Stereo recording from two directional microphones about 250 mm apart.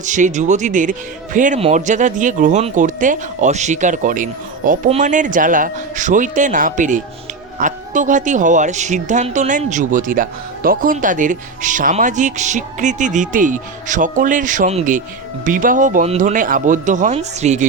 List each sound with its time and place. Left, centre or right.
0.0 s speech: right